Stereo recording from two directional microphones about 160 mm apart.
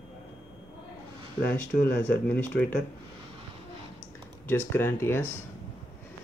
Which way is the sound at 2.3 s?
10° left (ahead or behind).